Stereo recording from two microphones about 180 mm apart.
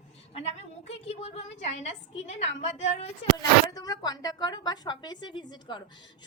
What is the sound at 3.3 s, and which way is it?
A woman's voice, 20° left (ahead or behind).